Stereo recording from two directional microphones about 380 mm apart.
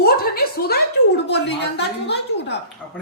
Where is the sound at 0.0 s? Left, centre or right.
Left.